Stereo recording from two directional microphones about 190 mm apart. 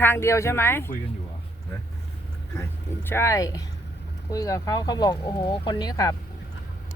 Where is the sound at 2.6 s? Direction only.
10° left (ahead or behind).